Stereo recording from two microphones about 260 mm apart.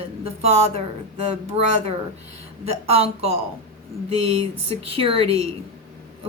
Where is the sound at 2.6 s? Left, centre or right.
Right.